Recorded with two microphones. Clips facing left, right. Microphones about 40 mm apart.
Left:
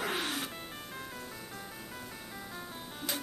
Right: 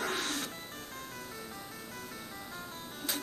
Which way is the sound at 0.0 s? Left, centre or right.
Centre.